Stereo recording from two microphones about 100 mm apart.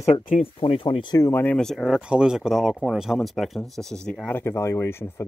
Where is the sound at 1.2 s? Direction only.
25° left (ahead or behind).